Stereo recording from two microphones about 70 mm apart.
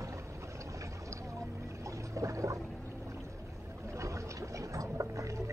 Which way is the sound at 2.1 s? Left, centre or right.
Right.